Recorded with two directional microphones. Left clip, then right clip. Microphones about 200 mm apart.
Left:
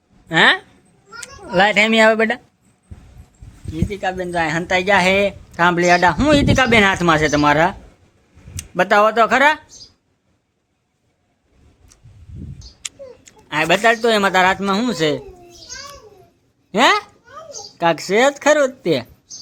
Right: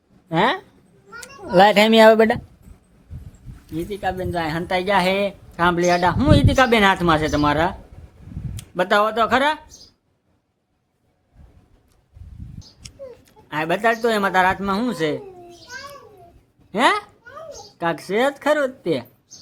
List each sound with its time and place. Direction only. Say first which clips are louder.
0.3 s speech: left 6 dB; 5° right (ahead or behind)
1.5 s speech: right 1 dB; 20° right (ahead or behind)
3.8 s speech: left 3 dB; 15° left (ahead or behind)
13.2 s speech: left 6 dB; 15° left (ahead or behind)
16.7 s speech: left 4 dB; 20° left (ahead or behind)